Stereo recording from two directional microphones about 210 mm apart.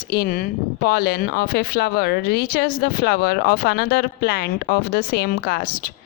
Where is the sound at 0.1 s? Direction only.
45° left (ahead or behind).